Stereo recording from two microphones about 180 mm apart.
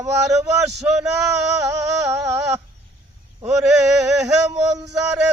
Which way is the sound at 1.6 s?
15° right (ahead or behind).